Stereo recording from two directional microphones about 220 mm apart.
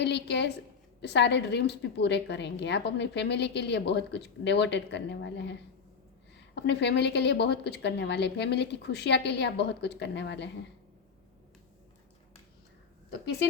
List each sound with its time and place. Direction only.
0.0 s a woman's voice: 50° left (ahead or behind)